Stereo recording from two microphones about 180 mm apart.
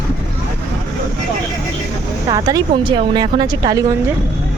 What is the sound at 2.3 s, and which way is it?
A woman's voice, 20° right (ahead or behind).